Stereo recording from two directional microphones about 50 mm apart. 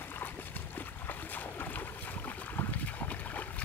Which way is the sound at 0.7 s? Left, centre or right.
Left.